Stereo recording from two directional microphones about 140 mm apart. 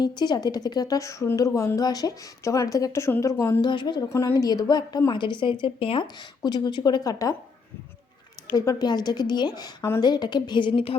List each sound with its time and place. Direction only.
0.2 s a woman's voice: 30° left (ahead or behind)
3.6 s speech: 30° left (ahead or behind)
4.1 s speech: 20° left (ahead or behind)
8.5 s a woman's voice: 25° left (ahead or behind)